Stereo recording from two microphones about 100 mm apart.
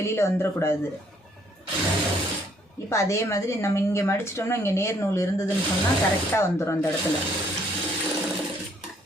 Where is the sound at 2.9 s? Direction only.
30° left (ahead or behind).